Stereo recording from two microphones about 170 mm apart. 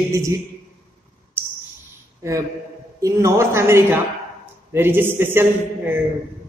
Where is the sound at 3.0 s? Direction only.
20° right (ahead or behind).